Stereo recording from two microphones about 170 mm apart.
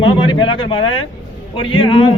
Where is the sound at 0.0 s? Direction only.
30° left (ahead or behind).